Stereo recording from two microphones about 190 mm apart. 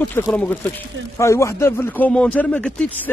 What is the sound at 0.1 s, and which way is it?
A man's voice, 10° left (ahead or behind).